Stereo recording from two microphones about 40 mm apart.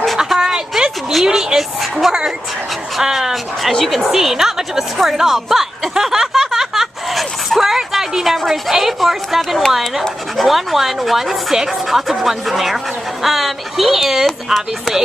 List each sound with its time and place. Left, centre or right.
0.4 s a sound: centre
1.2 s speech: centre
1.6 s a woman's voice: centre
3.8 s speech: centre
4.2 s speech: centre